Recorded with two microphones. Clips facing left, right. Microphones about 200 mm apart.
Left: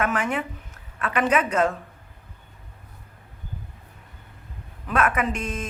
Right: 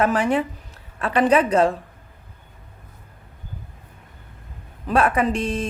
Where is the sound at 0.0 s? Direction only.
35° right (ahead or behind).